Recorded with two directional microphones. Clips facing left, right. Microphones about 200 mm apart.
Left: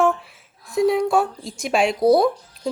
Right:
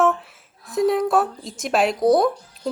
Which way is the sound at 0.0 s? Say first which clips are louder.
Even; centre (ahead or behind).